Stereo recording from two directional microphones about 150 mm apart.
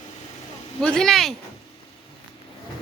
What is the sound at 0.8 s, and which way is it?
Speech, 5° left (ahead or behind).